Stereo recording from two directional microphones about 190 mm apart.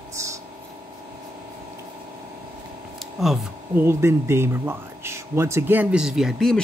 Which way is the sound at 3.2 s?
Centre (ahead or behind).